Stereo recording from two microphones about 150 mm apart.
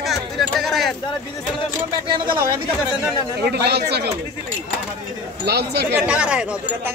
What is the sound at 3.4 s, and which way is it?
Speech, 90° right.